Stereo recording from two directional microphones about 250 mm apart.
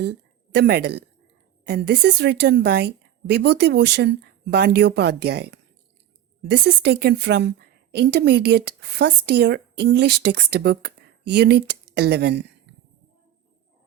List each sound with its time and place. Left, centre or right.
0.0 s a woman's voice: right